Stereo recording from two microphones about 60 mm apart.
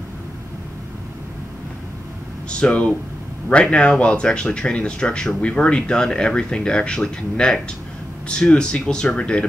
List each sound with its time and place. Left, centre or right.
2.5 s speech: centre